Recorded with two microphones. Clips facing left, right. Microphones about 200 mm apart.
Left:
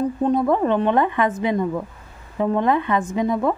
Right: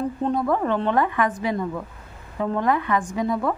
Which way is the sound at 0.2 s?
20° left (ahead or behind).